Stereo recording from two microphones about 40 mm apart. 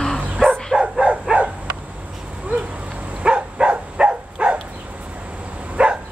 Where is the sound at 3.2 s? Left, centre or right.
Right.